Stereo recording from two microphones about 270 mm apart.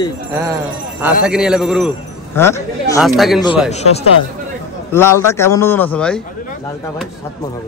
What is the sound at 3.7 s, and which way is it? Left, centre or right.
Speech, left.